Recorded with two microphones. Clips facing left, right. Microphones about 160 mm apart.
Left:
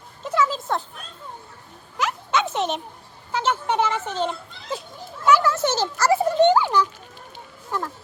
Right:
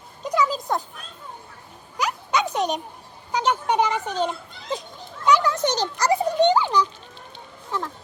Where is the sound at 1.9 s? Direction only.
Centre (ahead or behind).